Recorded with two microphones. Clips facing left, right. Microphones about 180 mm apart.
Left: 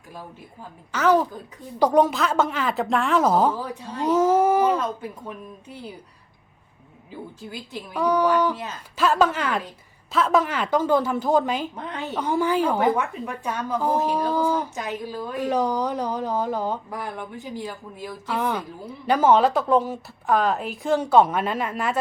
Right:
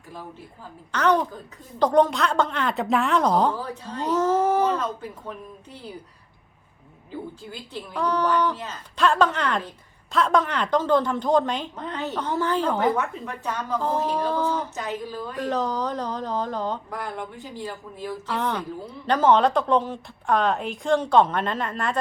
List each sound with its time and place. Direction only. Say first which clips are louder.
0.9 s a woman's voice: left 2 dB; 5° left (ahead or behind)
7.7 s a woman's voice: left 3 dB; 10° left (ahead or behind)